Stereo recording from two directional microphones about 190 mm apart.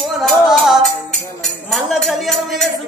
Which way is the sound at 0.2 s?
Centre (ahead or behind).